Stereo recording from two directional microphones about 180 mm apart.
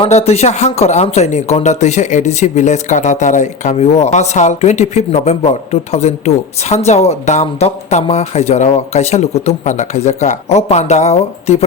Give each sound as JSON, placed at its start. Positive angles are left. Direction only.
{"t": 0.1, "sound": "speech", "side_deg": 35}